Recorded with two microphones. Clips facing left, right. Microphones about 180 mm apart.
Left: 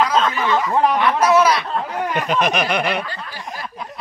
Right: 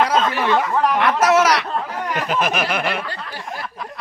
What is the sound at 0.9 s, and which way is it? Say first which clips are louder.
Speech: right 2 dB; 85° right.